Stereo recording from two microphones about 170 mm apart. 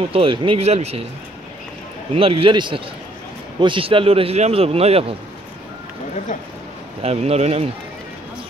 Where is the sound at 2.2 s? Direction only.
35° right (ahead or behind).